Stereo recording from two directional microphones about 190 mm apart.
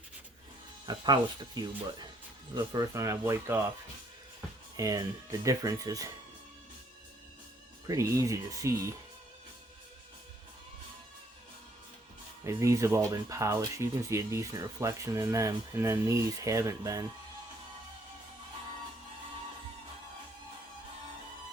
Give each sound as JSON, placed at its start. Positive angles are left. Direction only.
{"t": 0.9, "sound": "speech", "side_deg": -20}
{"t": 4.8, "sound": "speech", "side_deg": -20}
{"t": 7.9, "sound": "speech", "side_deg": -15}
{"t": 12.5, "sound": "speech", "side_deg": -15}